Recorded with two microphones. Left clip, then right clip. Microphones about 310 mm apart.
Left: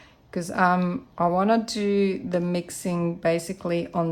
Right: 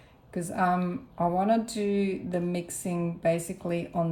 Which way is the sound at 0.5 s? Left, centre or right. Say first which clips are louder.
Left 5 dB; left.